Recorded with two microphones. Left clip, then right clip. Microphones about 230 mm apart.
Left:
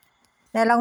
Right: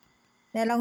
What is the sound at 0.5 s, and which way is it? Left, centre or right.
Speech, centre.